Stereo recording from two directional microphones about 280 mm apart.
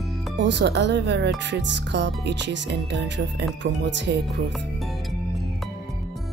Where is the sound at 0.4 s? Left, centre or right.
Right.